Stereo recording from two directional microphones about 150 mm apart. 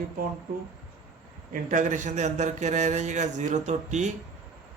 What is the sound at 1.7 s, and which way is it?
A man's voice, 55° right (ahead or behind).